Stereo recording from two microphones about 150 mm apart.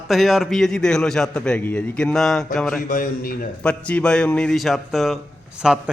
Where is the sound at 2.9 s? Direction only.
70° left (ahead or behind).